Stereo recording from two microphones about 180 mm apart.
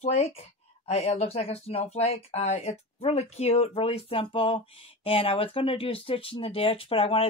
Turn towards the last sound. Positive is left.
turn(degrees=30)  # may be behind; listen again after turning